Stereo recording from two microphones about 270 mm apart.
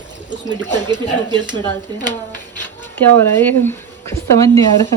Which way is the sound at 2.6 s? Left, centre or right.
Centre.